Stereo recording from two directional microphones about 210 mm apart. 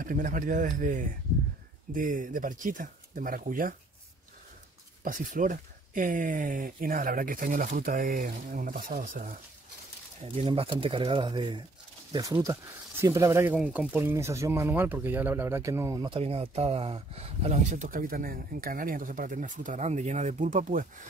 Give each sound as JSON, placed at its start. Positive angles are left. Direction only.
{"t": 0.0, "sound": "speech", "side_deg": -40}
{"t": 5.0, "sound": "speech", "side_deg": -40}
{"t": 10.2, "sound": "speech", "side_deg": -25}